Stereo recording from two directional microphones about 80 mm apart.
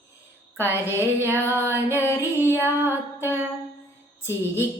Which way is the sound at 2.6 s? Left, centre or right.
Right.